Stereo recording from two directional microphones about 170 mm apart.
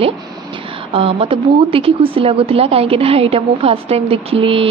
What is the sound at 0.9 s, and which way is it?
A woman's voice, 30° right (ahead or behind).